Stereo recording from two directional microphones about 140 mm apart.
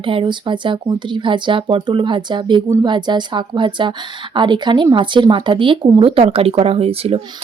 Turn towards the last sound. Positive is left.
turn(degrees=-45)  # may be behind; listen again after turning